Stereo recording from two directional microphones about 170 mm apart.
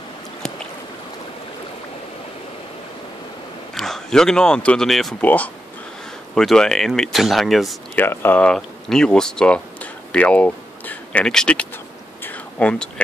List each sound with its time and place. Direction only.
3.7 s speech: centre (ahead or behind)
8.0 s speech: 10° left (ahead or behind)
12.2 s a sound: 10° left (ahead or behind)